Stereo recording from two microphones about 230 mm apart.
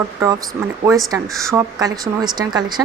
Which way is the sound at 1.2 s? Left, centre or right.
Centre.